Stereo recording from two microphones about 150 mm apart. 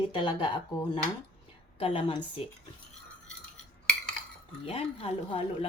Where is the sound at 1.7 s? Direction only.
35° left (ahead or behind).